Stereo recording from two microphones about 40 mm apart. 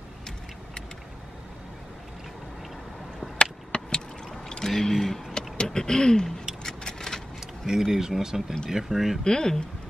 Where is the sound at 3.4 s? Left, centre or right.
Centre.